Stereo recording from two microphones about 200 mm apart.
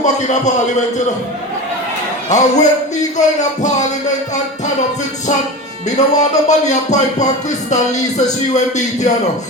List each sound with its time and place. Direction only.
0.0 s speech: 35° left (ahead or behind)
2.3 s speech: 35° left (ahead or behind)
6.1 s speech: 35° left (ahead or behind)